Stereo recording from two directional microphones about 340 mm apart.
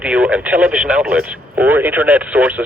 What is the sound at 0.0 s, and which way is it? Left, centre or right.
Speech, centre.